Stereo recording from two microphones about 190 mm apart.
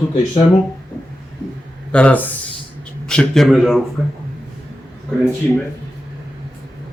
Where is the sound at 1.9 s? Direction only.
5° left (ahead or behind).